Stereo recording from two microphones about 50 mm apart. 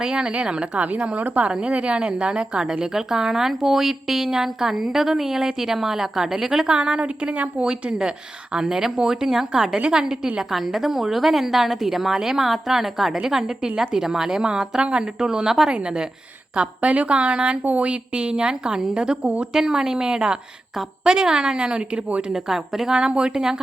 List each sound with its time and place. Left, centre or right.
0.0 s a woman's voice: centre
7.6 s a woman's voice: centre
22.3 s speech: centre